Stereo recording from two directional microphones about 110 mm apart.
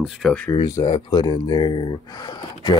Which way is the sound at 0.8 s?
40° left (ahead or behind).